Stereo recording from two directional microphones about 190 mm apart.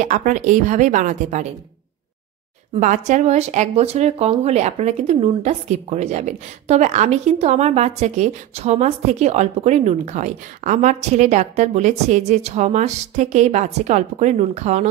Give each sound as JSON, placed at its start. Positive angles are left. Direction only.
{"t": 0.0, "sound": "speech", "side_deg": -40}
{"t": 2.7, "sound": "speech", "side_deg": -40}